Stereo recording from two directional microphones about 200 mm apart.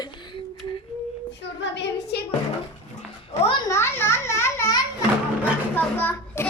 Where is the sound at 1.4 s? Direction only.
60° left (ahead or behind).